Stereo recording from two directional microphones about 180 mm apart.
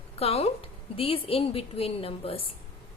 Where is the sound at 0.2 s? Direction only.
35° left (ahead or behind).